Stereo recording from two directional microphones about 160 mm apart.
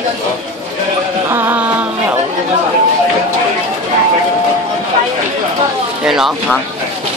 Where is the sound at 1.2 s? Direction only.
15° right (ahead or behind).